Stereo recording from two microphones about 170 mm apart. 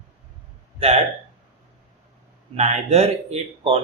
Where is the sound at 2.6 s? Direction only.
40° right (ahead or behind).